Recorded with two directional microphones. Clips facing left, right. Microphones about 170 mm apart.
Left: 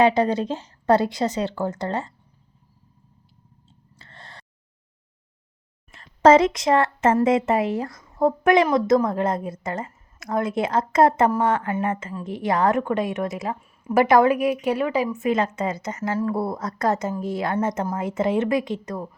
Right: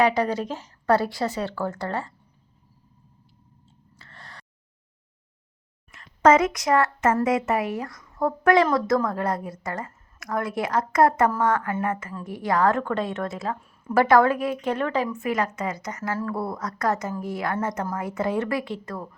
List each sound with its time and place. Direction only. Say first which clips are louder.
0.0 s a woman's voice: left 3 dB; 25° left (ahead or behind)
3.9 s gasp: left 1 dB; 25° left (ahead or behind)
5.9 s a woman's voice: left 3 dB; 30° left (ahead or behind)